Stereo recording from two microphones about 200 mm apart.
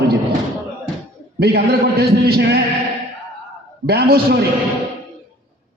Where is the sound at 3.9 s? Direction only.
50° right (ahead or behind).